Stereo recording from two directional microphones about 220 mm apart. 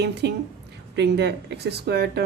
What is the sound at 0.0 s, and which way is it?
Speech, 50° right (ahead or behind).